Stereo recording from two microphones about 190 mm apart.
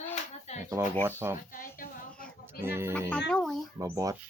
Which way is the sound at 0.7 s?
15° right (ahead or behind).